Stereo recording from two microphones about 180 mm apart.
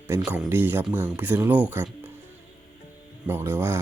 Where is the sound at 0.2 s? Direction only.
10° right (ahead or behind).